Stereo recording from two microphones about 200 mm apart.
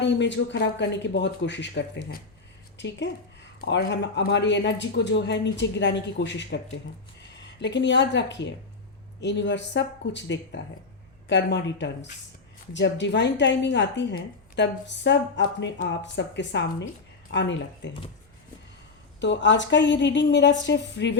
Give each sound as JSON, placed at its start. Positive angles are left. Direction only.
{"t": 0.0, "sound": "a woman's voice", "side_deg": 60}
{"t": 19.2, "sound": "a woman's voice", "side_deg": 65}